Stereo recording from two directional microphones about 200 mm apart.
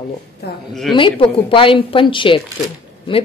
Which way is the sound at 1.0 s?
25° left (ahead or behind).